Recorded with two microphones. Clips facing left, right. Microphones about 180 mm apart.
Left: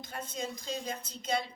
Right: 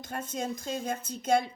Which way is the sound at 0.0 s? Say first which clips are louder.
Right 4 dB; 50° right (ahead or behind).